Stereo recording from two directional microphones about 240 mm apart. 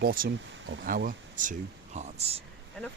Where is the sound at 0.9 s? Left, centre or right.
Right.